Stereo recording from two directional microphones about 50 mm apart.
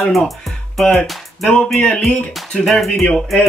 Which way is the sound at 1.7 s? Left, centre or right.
Centre.